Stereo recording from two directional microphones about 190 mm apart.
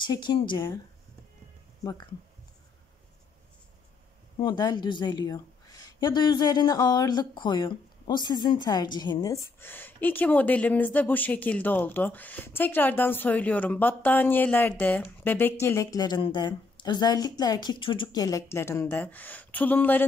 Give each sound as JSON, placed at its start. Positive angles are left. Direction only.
{"t": 0.0, "sound": "speech", "side_deg": 20}
{"t": 4.4, "sound": "a woman's voice", "side_deg": 25}